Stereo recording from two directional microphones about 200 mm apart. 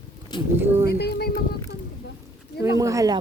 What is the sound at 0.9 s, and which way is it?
Speech, 55° left (ahead or behind).